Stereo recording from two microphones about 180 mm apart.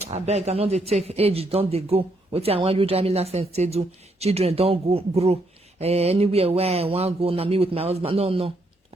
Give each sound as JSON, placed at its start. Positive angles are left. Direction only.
{"t": 0.0, "sound": "speech", "side_deg": -35}